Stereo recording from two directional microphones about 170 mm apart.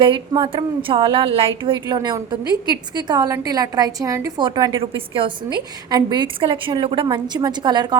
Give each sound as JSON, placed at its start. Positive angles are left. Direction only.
{"t": 0.0, "sound": "a woman's voice", "side_deg": -30}